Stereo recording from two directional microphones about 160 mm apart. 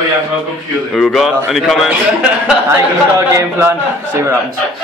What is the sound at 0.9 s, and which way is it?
Speech, centre (ahead or behind).